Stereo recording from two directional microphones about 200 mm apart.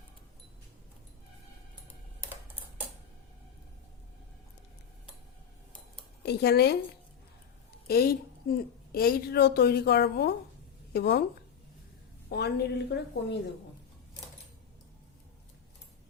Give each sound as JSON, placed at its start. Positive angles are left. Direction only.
{"t": 6.2, "sound": "a woman's voice", "side_deg": 55}
{"t": 7.9, "sound": "a woman's voice", "side_deg": 50}
{"t": 12.3, "sound": "a woman's voice", "side_deg": 55}